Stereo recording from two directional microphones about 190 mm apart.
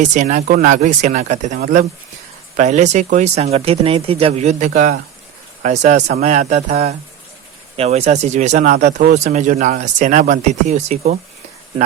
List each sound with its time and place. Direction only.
0.0 s speech: 40° right (ahead or behind)
2.6 s speech: 40° right (ahead or behind)